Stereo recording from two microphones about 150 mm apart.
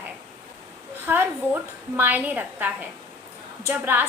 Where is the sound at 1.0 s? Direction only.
15° right (ahead or behind).